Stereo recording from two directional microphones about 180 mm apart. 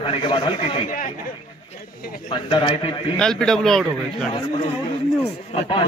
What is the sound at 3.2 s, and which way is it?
Speech, 5° left (ahead or behind).